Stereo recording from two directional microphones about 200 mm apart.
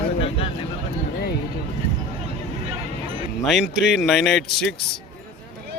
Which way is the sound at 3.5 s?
5° right (ahead or behind).